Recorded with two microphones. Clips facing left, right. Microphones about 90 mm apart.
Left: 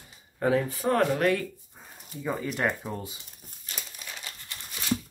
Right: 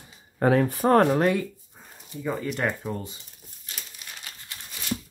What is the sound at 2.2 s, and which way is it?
Speech, centre (ahead or behind).